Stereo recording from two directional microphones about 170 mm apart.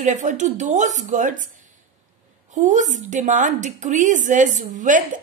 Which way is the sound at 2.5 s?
45° right (ahead or behind).